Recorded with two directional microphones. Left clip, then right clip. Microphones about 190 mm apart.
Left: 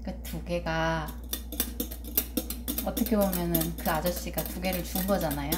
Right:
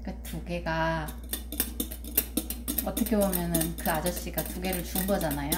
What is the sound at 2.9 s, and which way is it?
A woman's voice, 5° left (ahead or behind).